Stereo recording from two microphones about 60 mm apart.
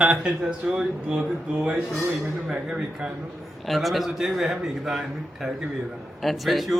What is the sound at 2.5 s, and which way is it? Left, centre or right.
Speech, centre.